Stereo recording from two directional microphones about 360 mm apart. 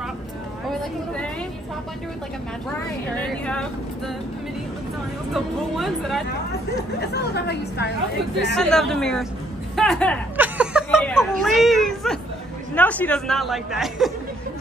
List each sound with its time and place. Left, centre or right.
0.7 s speech: centre
3.2 s a woman's voice: centre
5.3 s a woman's voice: centre
7.2 s a woman's voice: left
8.5 s a woman's voice: centre
9.8 s a sound: centre
12.7 s a woman's voice: centre